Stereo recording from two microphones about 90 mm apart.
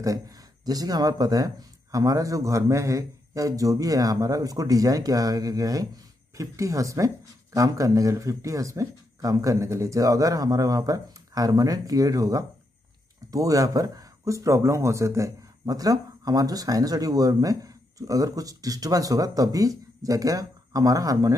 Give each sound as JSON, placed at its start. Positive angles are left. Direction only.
{"t": 0.0, "sound": "speech", "side_deg": -40}